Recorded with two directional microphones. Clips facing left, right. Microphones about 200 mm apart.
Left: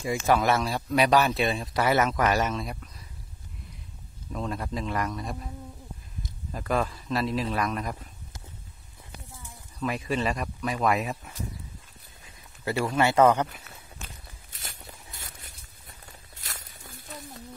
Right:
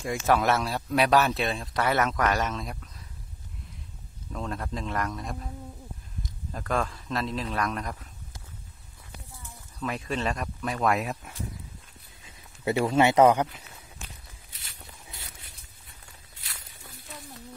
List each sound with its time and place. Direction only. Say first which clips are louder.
0.0 s speech: left 1 dB; centre (ahead or behind)
4.3 s speech: left 2 dB; 5° left (ahead or behind)
6.5 s speech: left 2 dB; 5° left (ahead or behind)
9.8 s speech: left 2 dB; 5° left (ahead or behind)
12.6 s speech: right 3 dB; 20° right (ahead or behind)
14.5 s a sound: left 5 dB; 45° left (ahead or behind)
16.3 s walk: left 4 dB; 45° left (ahead or behind)